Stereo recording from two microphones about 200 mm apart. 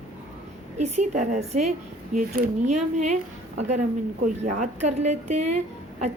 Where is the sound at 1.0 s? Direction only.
35° right (ahead or behind).